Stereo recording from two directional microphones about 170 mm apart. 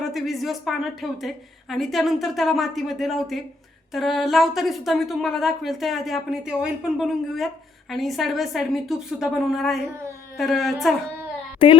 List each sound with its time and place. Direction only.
0.0 s a woman's voice: centre (ahead or behind)
11.6 s a woman's voice: 30° left (ahead or behind)